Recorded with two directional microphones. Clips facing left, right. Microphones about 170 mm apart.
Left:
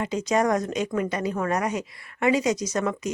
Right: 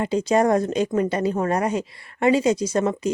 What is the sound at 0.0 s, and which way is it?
A woman's voice, 30° right (ahead or behind).